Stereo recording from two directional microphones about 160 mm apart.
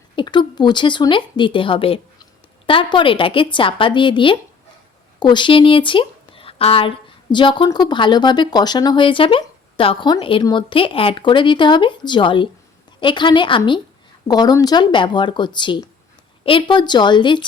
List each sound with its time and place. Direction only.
0.2 s speech: 30° left (ahead or behind)